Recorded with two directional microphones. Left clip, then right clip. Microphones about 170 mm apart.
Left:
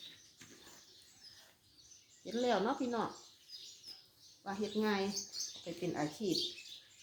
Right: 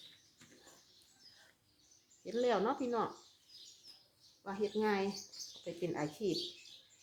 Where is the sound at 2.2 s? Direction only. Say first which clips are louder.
Right 1 dB; 30° right (ahead or behind).